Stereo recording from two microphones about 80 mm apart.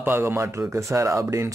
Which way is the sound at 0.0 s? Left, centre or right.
Right.